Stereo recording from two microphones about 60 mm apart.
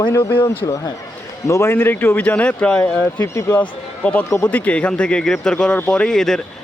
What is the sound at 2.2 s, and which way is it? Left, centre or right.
Speech, left.